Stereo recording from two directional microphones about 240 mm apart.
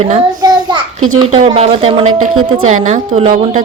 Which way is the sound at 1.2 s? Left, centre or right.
Right.